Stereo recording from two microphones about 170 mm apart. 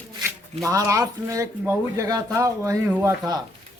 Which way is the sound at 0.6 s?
20° right (ahead or behind).